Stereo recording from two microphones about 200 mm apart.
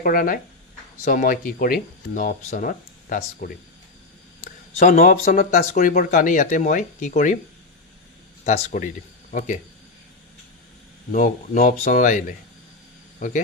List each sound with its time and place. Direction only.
0.0 s speech: 45° left (ahead or behind)
4.8 s speech: 45° left (ahead or behind)
8.4 s speech: 40° left (ahead or behind)
11.1 s speech: 40° left (ahead or behind)